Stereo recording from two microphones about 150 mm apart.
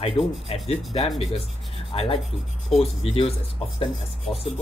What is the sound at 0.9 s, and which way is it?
Speech, 45° left (ahead or behind).